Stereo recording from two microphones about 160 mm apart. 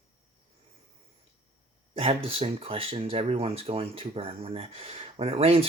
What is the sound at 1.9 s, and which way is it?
Speech, 35° right (ahead or behind).